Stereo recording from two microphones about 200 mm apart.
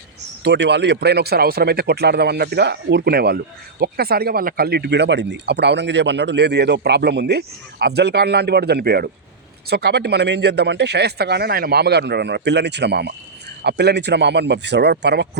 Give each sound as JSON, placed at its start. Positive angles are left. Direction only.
{"t": 0.4, "sound": "speech", "side_deg": -60}